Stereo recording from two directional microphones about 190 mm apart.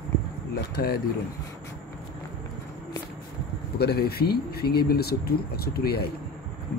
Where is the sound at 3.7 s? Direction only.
55° left (ahead or behind).